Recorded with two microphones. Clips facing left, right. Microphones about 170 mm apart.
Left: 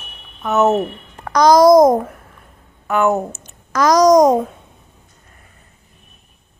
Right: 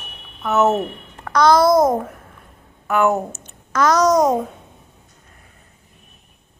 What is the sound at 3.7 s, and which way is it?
Speech, 15° left (ahead or behind).